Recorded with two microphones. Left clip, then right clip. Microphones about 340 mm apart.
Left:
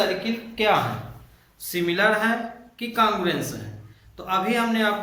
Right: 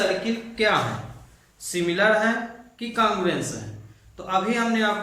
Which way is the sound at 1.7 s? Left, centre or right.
Centre.